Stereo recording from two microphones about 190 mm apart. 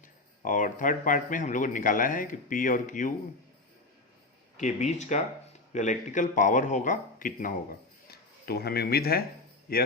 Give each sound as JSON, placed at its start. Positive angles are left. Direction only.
{"t": 0.4, "sound": "speech", "side_deg": 45}
{"t": 4.5, "sound": "speech", "side_deg": 40}